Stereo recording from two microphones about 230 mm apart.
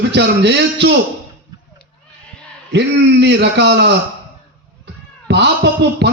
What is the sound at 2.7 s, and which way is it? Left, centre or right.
A man's voice, right.